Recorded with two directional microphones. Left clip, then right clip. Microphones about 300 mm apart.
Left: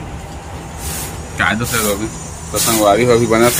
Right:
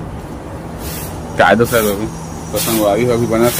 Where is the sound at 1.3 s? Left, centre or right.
Centre.